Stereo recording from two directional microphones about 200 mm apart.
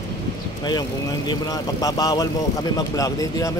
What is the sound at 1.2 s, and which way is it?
Speech, 20° left (ahead or behind).